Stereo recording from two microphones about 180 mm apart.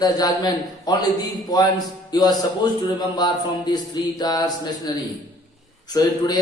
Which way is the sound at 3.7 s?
20° left (ahead or behind).